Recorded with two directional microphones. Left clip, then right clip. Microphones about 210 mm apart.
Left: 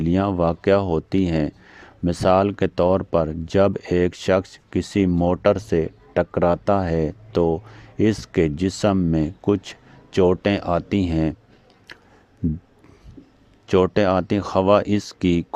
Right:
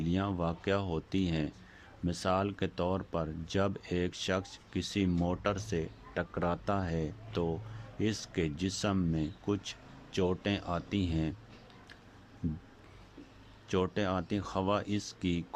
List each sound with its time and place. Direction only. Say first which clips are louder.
0.0 s speech: left 14 dB; 35° left (ahead or behind)
11.9 s a sound: left 16 dB; 35° left (ahead or behind)
13.7 s speech: left 15 dB; 35° left (ahead or behind)